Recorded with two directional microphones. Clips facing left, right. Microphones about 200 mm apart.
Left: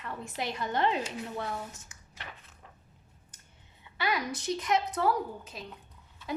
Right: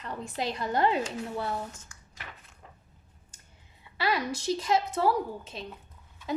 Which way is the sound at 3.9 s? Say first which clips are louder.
Right 3 dB; 30° right (ahead or behind).